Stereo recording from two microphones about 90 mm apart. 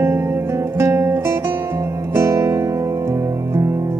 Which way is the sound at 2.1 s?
30° right (ahead or behind).